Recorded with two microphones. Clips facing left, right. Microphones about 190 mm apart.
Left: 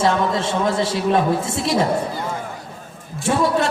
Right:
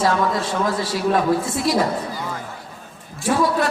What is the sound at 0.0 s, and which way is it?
A man's voice, 25° left (ahead or behind).